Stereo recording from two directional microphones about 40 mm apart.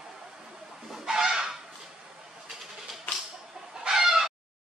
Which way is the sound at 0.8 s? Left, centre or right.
Centre.